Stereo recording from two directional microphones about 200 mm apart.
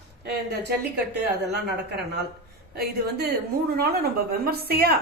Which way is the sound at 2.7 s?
50° right (ahead or behind).